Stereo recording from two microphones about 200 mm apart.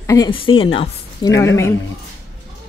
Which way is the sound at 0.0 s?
15° left (ahead or behind).